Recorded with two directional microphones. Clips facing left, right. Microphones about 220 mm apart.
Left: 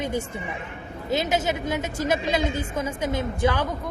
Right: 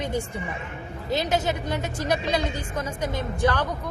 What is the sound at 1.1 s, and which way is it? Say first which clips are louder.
Speech: left 1 dB; 20° left (ahead or behind).